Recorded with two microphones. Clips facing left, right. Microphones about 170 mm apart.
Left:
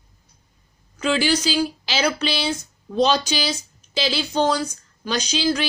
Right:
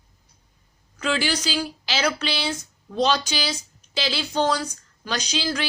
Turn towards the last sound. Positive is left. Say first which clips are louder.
# left 3 dB
turn(degrees=20)  # may be behind; listen again after turning